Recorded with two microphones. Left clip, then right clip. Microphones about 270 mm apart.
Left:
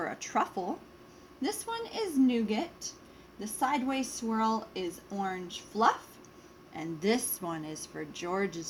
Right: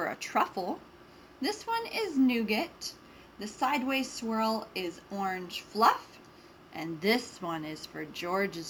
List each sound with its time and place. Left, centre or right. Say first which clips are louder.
0.0 s a woman's voice: right 2 dB; centre
7.0 s a woman's voice: right 1 dB; left